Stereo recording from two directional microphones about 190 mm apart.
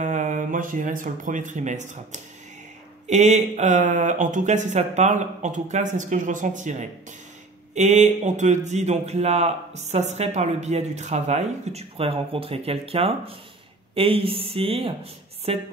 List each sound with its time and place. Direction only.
0.0 s a man's voice: 40° right (ahead or behind)